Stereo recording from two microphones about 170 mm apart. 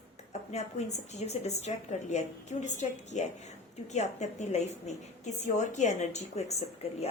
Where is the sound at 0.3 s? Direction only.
40° left (ahead or behind).